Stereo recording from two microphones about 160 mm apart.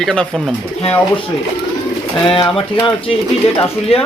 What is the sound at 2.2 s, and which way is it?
Speech, 35° left (ahead or behind).